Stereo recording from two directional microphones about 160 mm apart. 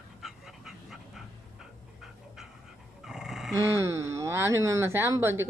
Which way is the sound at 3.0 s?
5° right (ahead or behind).